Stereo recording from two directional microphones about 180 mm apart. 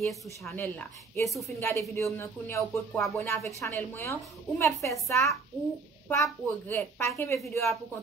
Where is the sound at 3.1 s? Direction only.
15° left (ahead or behind).